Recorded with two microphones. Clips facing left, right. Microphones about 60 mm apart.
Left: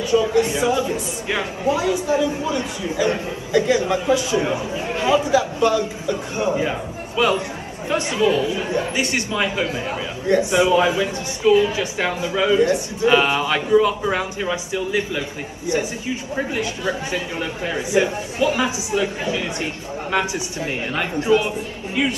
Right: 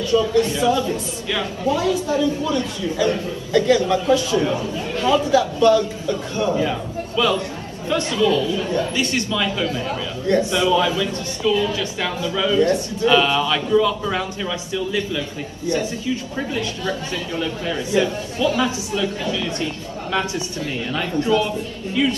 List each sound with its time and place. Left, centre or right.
0.0 s a woman's voice: centre